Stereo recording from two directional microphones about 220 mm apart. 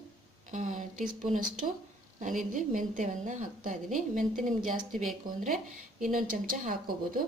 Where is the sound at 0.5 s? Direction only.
35° right (ahead or behind).